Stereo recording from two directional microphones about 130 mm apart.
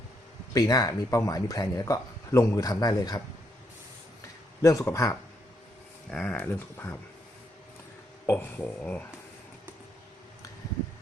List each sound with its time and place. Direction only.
0.5 s speech: 25° left (ahead or behind)
4.6 s speech: 25° left (ahead or behind)
6.1 s speech: 15° left (ahead or behind)
8.3 s speech: 15° left (ahead or behind)